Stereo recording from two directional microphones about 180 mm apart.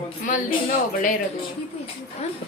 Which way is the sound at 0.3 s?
45° left (ahead or behind).